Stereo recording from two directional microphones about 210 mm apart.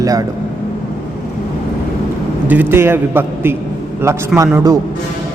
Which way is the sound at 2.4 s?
10° right (ahead or behind).